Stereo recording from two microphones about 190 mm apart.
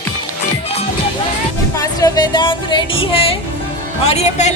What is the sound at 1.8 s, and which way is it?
Speech, 20° left (ahead or behind).